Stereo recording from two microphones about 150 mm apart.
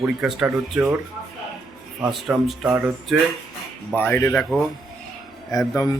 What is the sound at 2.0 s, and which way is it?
Speech, 5° right (ahead or behind).